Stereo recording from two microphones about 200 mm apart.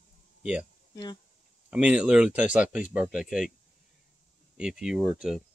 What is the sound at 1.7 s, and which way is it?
Speech, 5° right (ahead or behind).